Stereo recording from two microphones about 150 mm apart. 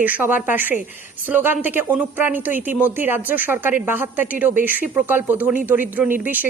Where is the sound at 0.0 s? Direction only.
10° right (ahead or behind).